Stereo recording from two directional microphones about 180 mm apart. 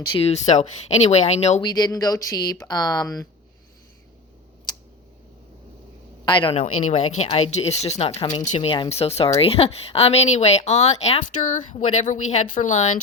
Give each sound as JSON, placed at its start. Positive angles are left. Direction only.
{"t": 0.1, "sound": "speech", "side_deg": 35}
{"t": 1.6, "sound": "speech", "side_deg": 20}
{"t": 6.2, "sound": "speech", "side_deg": 25}
{"t": 6.6, "sound": "speech", "side_deg": 40}
{"t": 8.2, "sound": "speech", "side_deg": 25}
{"t": 8.4, "sound": "speech", "side_deg": 35}